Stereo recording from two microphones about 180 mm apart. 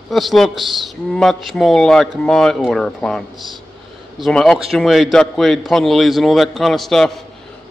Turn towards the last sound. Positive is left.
turn(degrees=0)  # may be behind; listen again after turning